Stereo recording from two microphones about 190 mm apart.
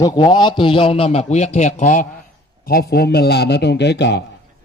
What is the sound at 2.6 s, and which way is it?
A man's voice, 55° left (ahead or behind).